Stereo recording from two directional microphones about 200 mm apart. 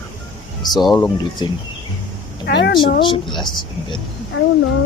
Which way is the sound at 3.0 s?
25° left (ahead or behind).